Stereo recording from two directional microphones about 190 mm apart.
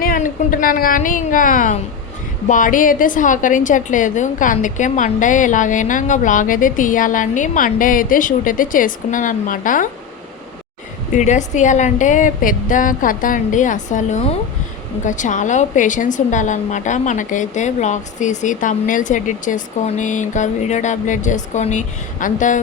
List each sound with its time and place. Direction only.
0.0 s a woman's voice: 50° left (ahead or behind)
11.1 s a woman's voice: 40° left (ahead or behind)